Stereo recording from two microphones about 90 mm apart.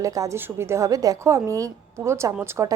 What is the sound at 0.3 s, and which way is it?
A woman's voice, 25° right (ahead or behind).